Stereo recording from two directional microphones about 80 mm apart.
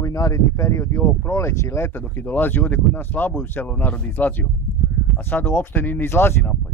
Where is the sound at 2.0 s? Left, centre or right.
Left.